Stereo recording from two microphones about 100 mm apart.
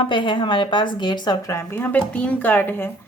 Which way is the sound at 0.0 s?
55° left (ahead or behind).